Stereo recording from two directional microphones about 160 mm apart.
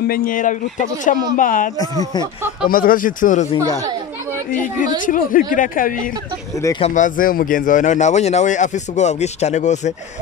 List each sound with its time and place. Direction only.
0.0 s speech: 65° left (ahead or behind)
1.8 s speech: 25° left (ahead or behind)
2.7 s speech: 60° left (ahead or behind)
4.5 s speech: 55° left (ahead or behind)